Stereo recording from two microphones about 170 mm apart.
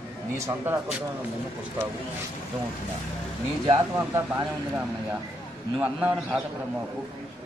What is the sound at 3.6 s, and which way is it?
Speech, 20° right (ahead or behind).